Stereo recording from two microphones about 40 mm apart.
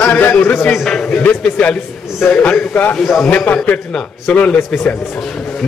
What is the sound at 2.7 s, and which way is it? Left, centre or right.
Speech, left.